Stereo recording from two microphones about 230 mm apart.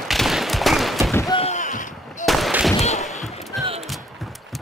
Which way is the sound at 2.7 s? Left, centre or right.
Left.